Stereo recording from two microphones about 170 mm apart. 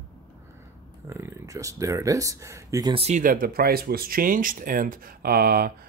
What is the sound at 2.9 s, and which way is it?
Speech, 40° right (ahead or behind).